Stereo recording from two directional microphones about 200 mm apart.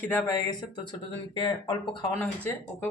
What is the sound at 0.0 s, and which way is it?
Speech, 10° left (ahead or behind).